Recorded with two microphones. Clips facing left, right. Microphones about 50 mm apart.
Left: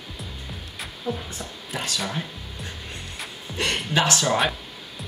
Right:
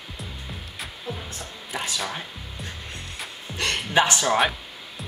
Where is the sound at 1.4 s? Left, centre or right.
Centre.